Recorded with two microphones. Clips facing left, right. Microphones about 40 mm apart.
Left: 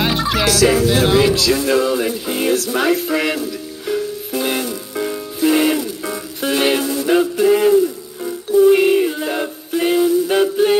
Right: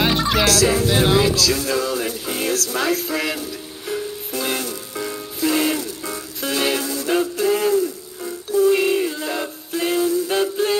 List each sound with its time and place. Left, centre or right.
0.0 s music: centre
0.5 s music: left
0.8 s music: centre
1.3 s music: left
2.0 s speech: centre
2.6 s ukulele: left
5.4 s music: centre